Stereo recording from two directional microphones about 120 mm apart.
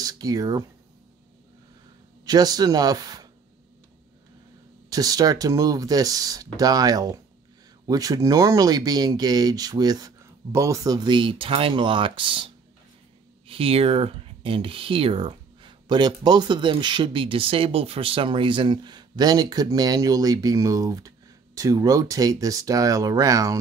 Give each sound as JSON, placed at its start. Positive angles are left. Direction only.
{"t": 0.0, "sound": "speech", "side_deg": -30}
{"t": 2.2, "sound": "speech", "side_deg": -35}
{"t": 4.8, "sound": "speech", "side_deg": -30}
{"t": 11.1, "sound": "speech", "side_deg": -45}